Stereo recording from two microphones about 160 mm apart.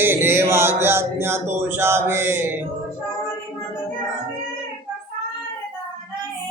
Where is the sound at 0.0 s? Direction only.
15° right (ahead or behind).